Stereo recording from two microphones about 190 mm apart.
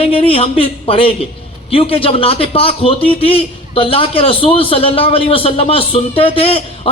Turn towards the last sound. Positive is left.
turn(degrees=30)  # may be behind; listen again after turning